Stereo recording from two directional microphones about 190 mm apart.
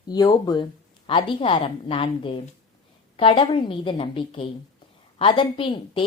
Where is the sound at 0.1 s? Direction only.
20° left (ahead or behind).